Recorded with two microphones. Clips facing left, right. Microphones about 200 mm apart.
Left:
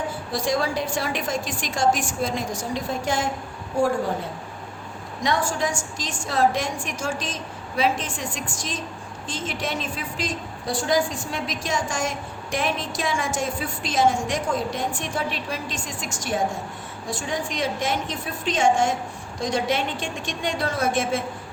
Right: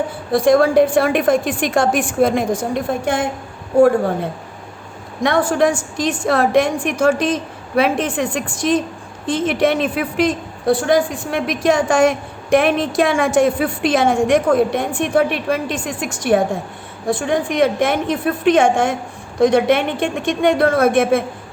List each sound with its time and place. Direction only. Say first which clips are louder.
0.3 s a woman's voice: right 12 dB; 55° right (ahead or behind)